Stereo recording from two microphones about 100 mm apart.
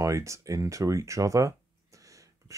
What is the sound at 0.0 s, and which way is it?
Speech, 30° right (ahead or behind).